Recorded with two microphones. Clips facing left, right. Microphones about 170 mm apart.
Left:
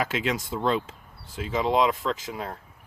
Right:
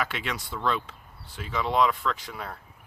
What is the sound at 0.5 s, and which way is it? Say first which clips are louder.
Speech: even; 25° left (ahead or behind).